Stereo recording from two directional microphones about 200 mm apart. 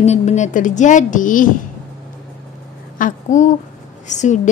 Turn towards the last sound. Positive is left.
turn(degrees=35)  # may be behind; listen again after turning